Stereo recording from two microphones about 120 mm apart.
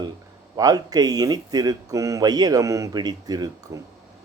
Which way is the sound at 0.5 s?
30° right (ahead or behind).